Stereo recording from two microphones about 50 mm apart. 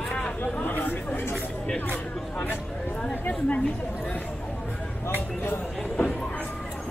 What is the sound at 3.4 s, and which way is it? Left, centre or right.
Chatter, left.